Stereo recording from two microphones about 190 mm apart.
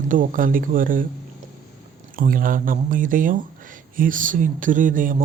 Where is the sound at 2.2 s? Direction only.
45° right (ahead or behind).